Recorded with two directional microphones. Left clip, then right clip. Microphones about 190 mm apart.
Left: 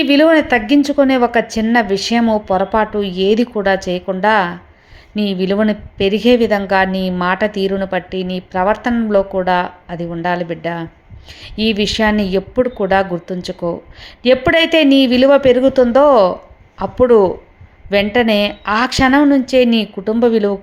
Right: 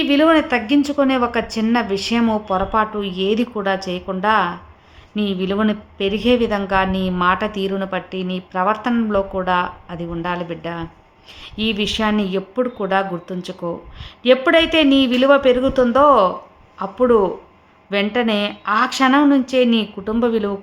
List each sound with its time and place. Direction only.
0.0 s a woman's voice: 25° left (ahead or behind)